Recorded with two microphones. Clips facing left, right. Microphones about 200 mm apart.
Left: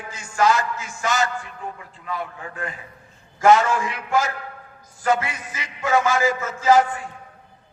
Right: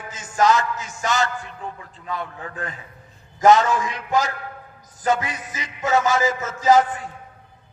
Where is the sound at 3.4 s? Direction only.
20° right (ahead or behind).